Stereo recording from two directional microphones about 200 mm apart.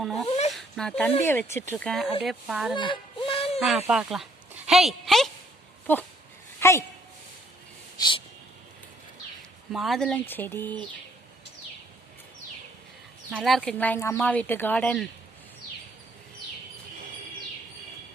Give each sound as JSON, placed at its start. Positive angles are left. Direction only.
{"t": 0.0, "sound": "speech", "side_deg": 0}
{"t": 0.3, "sound": "zipper", "side_deg": 35}
{"t": 0.5, "sound": "a sound", "side_deg": 5}
{"t": 1.2, "sound": "speech", "side_deg": 10}
{"t": 2.7, "sound": "a sound", "side_deg": 25}
{"t": 3.8, "sound": "speech", "side_deg": 0}
{"t": 6.6, "sound": "a woman's voice", "side_deg": 15}
{"t": 7.9, "sound": "speech", "side_deg": 20}
{"t": 9.7, "sound": "speech", "side_deg": 0}
{"t": 13.3, "sound": "speech", "side_deg": -5}